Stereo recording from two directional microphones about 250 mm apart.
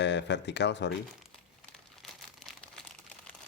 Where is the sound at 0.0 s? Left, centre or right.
Left.